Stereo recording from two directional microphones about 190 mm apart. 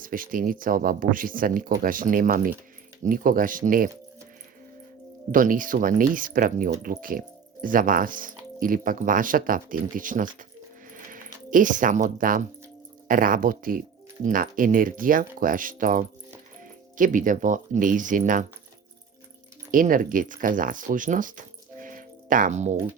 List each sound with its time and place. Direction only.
0.0 s speech: 45° right (ahead or behind)
5.3 s speech: 45° right (ahead or behind)
19.7 s speech: 45° right (ahead or behind)